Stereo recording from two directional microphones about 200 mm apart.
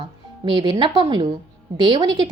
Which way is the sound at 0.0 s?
25° right (ahead or behind).